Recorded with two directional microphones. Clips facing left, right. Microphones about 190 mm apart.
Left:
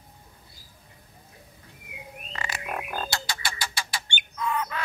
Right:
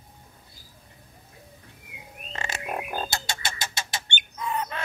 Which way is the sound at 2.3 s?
25° right (ahead or behind).